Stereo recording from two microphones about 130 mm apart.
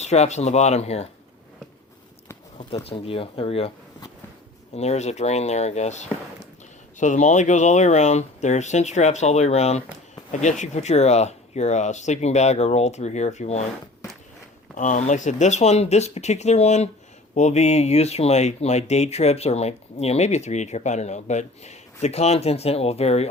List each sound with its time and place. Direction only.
0.0 s speech: 60° left (ahead or behind)
2.6 s speech: 45° left (ahead or behind)
4.7 s speech: 55° left (ahead or behind)
14.8 s speech: 70° left (ahead or behind); by 23.3 s 55° left (ahead or behind)